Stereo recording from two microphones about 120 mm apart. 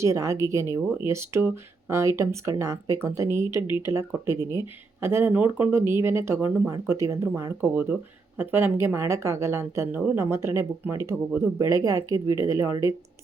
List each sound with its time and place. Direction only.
0.0 s speech: 25° right (ahead or behind)